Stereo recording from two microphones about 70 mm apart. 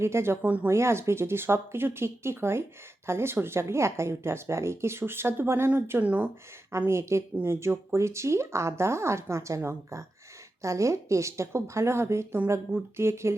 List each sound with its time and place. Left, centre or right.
0.0 s speech: right
0.4 s speech: right
0.7 s speech: right
6.7 s speech: right